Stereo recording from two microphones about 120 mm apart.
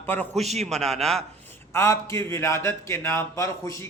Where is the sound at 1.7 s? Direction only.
20° left (ahead or behind).